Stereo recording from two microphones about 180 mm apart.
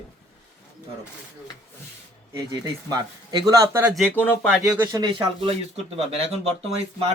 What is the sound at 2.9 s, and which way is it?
Speech, 20° right (ahead or behind).